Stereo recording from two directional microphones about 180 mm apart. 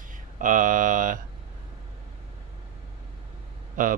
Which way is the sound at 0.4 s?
45° right (ahead or behind).